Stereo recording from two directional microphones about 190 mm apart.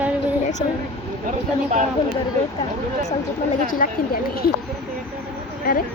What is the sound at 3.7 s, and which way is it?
Speech, 50° left (ahead or behind).